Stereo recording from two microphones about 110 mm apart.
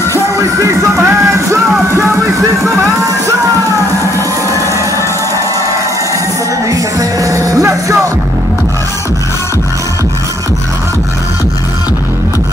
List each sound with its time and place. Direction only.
0.6 s music: 25° right (ahead or behind)
6.7 s music: 30° right (ahead or behind)